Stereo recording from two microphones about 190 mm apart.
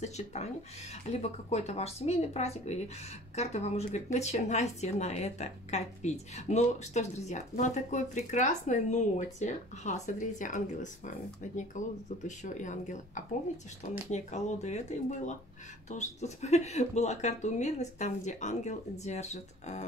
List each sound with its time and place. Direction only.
0.0 s speech: 35° left (ahead or behind)